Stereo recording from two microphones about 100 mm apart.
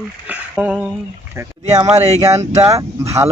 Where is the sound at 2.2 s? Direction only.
35° right (ahead or behind).